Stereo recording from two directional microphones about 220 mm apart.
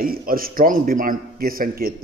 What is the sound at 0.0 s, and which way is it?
A man's voice, 40° right (ahead or behind).